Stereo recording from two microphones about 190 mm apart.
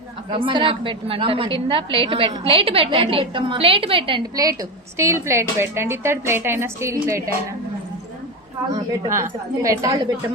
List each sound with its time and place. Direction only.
0.3 s a woman's voice: 25° right (ahead or behind)
9.6 s speech: 20° right (ahead or behind)